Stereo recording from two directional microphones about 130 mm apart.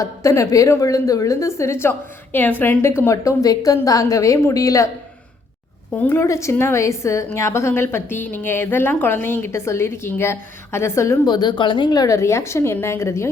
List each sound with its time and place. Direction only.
0.0 s a woman's voice: 25° left (ahead or behind)
5.9 s a woman's voice: 15° left (ahead or behind)
11.3 s a woman's voice: 35° left (ahead or behind)